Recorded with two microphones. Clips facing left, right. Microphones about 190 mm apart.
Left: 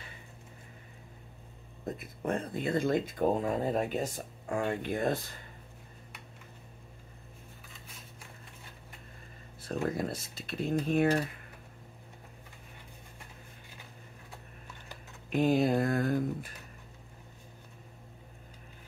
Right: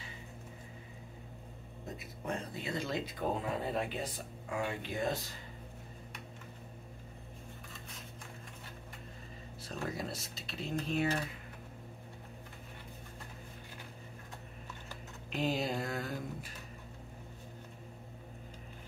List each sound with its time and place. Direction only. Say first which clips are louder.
2.0 s speech: left 6 dB; 50° left (ahead or behind)
9.6 s speech: left 7 dB; 50° left (ahead or behind)
15.2 s speech: left 8 dB; 50° left (ahead or behind)